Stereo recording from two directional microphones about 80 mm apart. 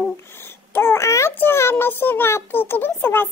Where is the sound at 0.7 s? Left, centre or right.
Left.